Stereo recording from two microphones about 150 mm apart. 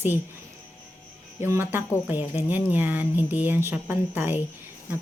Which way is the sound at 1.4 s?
15° right (ahead or behind).